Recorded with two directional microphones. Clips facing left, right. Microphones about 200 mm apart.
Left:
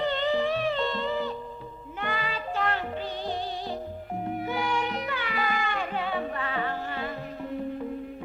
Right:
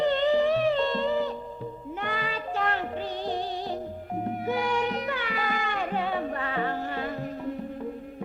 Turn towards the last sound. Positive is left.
turn(degrees=-45)  # may be behind; listen again after turning